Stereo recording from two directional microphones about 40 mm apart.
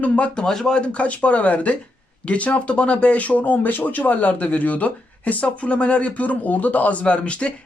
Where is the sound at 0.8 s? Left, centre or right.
Left.